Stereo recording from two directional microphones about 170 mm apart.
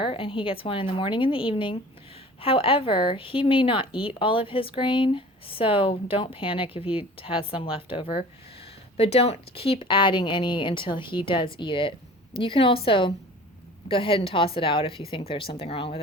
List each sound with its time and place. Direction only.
0.0 s speech: 30° left (ahead or behind)